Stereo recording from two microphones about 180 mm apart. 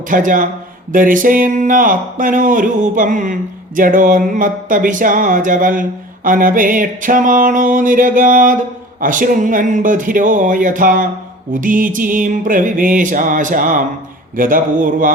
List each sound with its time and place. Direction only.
0.1 s speech: 50° right (ahead or behind)